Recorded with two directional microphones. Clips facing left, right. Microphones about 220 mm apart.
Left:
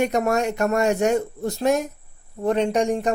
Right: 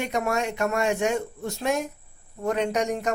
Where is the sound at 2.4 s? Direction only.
30° left (ahead or behind).